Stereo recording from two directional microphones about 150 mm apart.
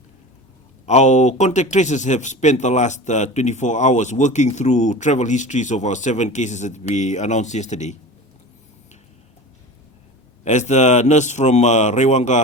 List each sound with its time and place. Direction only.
0.9 s speech: 50° left (ahead or behind)
10.4 s speech: 50° left (ahead or behind)